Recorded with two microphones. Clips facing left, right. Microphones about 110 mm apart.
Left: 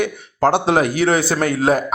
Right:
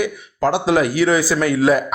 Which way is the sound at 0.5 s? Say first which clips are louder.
Even; 55° left (ahead or behind).